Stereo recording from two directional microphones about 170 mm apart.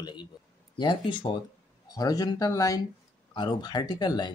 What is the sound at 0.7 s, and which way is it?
Speech, 30° left (ahead or behind).